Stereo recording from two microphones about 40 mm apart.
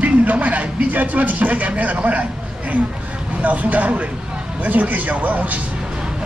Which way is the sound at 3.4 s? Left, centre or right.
Right.